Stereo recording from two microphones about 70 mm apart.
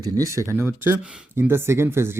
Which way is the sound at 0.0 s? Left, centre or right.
Right.